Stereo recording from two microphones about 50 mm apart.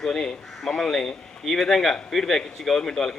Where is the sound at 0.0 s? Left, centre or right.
Centre.